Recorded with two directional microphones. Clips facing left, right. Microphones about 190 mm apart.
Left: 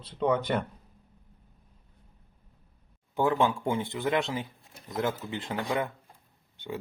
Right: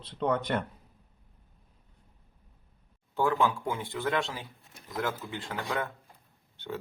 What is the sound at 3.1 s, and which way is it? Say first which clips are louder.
A man's voice: left 2 dB; 20° left (ahead or behind).